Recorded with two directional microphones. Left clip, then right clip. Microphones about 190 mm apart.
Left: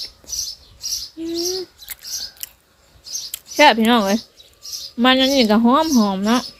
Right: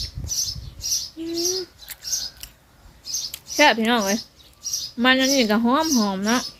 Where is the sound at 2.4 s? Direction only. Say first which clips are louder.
Left 4 dB; 20° left (ahead or behind).